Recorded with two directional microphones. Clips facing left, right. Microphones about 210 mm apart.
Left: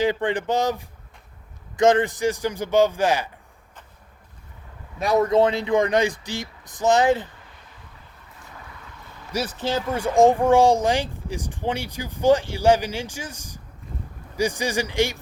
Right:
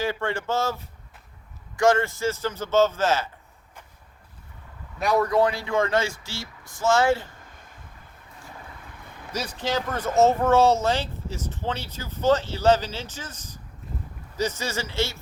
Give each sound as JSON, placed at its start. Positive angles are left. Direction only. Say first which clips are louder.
{"t": 0.0, "sound": "speech", "louder": "left 5 dB", "side_deg": 20}
{"t": 5.1, "sound": "speech", "louder": "left 3 dB", "side_deg": 20}
{"t": 7.5, "sound": "a sound", "louder": "even", "side_deg": -45}
{"t": 9.3, "sound": "speech", "louder": "left 2 dB", "side_deg": 10}